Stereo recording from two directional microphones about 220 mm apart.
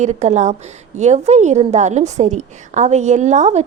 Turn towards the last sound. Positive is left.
turn(degrees=-30)  # may be behind; listen again after turning